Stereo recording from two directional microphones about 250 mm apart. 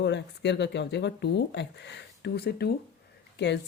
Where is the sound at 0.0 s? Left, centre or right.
Left.